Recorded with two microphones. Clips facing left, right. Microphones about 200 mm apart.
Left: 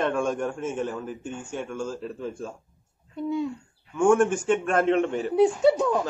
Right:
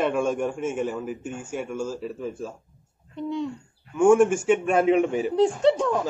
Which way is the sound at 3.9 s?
5° right (ahead or behind).